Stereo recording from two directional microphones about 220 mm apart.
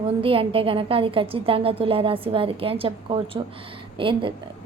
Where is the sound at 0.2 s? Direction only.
25° right (ahead or behind).